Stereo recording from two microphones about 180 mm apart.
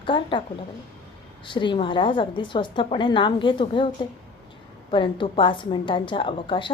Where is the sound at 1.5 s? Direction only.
25° left (ahead or behind).